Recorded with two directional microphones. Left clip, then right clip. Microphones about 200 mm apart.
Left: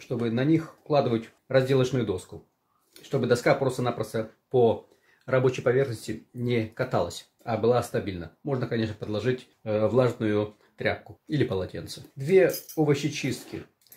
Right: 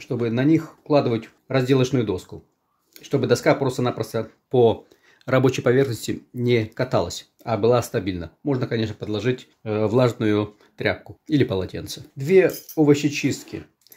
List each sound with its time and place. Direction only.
0.0 s speech: 40° right (ahead or behind)